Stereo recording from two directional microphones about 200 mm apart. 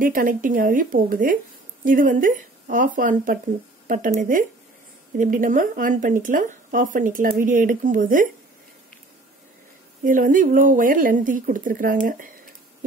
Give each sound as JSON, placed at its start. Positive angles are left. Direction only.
{"t": 0.0, "sound": "speech", "side_deg": -45}
{"t": 10.0, "sound": "speech", "side_deg": -40}